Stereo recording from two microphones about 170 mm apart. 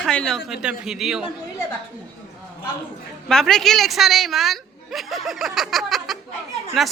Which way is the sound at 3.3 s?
5° left (ahead or behind).